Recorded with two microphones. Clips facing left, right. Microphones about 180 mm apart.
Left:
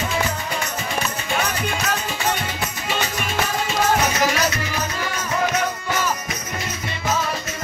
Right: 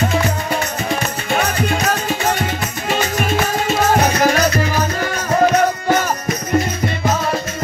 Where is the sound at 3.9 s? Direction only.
50° right (ahead or behind).